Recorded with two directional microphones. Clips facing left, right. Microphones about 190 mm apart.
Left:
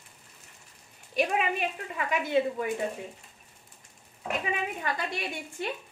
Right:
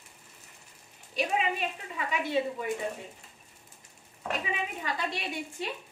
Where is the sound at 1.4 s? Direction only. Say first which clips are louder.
Left 2 dB; 55° left (ahead or behind).